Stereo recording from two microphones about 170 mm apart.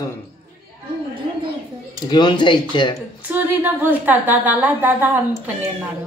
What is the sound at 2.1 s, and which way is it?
Speech, 25° left (ahead or behind).